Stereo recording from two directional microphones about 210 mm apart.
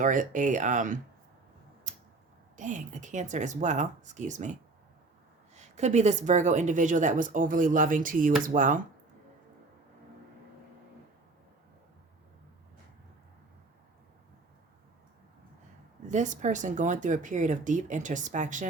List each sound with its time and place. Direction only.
0.0 s a woman's voice: 40° right (ahead or behind)
1.9 s tick-tock: 35° right (ahead or behind)
2.6 s a woman's voice: 35° right (ahead or behind)
5.5 s a woman's voice: 35° right (ahead or behind)
16.0 s a woman's voice: 35° right (ahead or behind)